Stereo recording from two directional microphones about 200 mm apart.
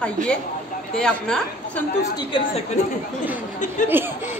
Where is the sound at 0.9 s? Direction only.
5° left (ahead or behind).